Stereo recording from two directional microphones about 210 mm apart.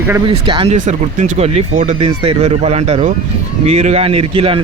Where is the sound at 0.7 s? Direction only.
35° right (ahead or behind).